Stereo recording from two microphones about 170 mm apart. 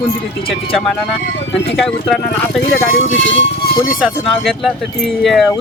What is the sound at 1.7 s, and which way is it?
Speech, centre (ahead or behind).